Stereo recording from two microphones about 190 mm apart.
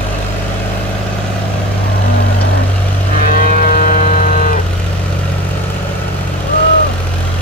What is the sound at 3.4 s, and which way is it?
Vehicle, 45° left (ahead or behind).